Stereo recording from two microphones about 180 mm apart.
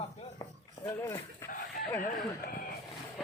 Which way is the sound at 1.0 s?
15° left (ahead or behind).